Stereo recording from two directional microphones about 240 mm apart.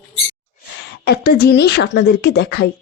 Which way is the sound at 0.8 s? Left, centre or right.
Left.